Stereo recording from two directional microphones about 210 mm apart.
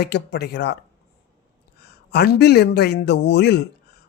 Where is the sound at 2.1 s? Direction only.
50° left (ahead or behind).